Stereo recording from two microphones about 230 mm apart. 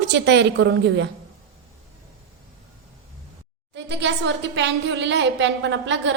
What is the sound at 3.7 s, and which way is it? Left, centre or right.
A woman's voice, right.